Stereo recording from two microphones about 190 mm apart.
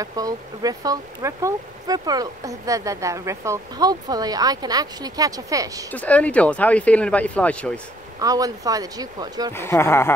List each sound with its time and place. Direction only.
0.0 s speech: 20° right (ahead or behind)
5.9 s speech: 5° left (ahead or behind)
8.2 s speech: 20° right (ahead or behind)
9.5 s speech: 15° left (ahead or behind)